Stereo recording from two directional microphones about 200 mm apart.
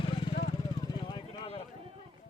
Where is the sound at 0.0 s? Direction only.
25° left (ahead or behind).